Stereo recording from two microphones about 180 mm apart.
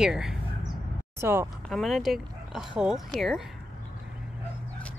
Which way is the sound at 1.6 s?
Centre (ahead or behind).